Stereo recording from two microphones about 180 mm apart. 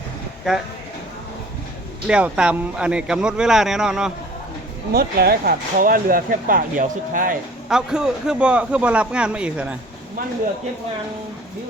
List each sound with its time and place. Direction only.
0.5 s speech: centre (ahead or behind)
2.0 s speech: 5° right (ahead or behind)
4.9 s speech: 60° right (ahead or behind)
7.7 s speech: 5° right (ahead or behind)